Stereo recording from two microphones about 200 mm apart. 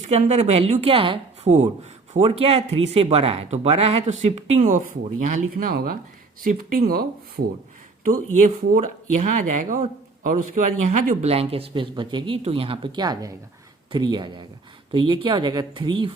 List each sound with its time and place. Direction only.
0.1 s speech: 35° right (ahead or behind)